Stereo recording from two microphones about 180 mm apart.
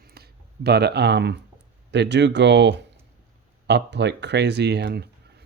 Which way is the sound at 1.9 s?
70° right (ahead or behind).